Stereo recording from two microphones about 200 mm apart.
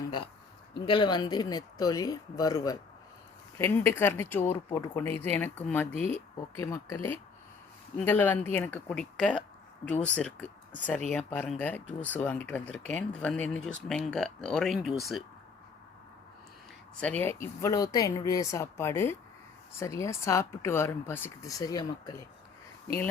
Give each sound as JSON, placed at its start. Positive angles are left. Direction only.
{"t": 0.7, "sound": "speech", "side_deg": 25}
{"t": 17.0, "sound": "speech", "side_deg": 10}